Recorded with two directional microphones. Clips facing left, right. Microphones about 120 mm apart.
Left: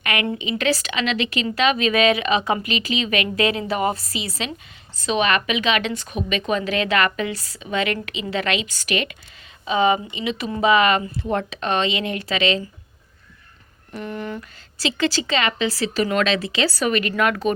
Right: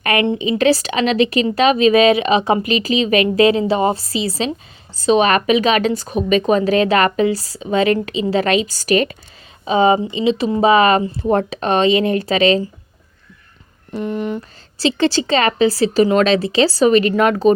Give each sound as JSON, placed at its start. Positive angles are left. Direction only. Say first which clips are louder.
{"t": 0.0, "sound": "a sound", "louder": "right 7 dB", "side_deg": -35}
{"t": 0.3, "sound": "a woman's voice", "louder": "right 8 dB", "side_deg": -30}
{"t": 13.9, "sound": "speech", "louder": "right 7 dB", "side_deg": -20}
{"t": 14.8, "sound": "a woman's voice", "louder": "right 6 dB", "side_deg": -35}